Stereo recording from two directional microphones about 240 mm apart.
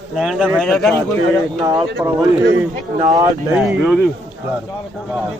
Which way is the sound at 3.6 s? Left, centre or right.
Centre.